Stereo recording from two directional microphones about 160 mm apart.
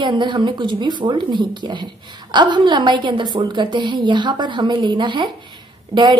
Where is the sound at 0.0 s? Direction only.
30° right (ahead or behind).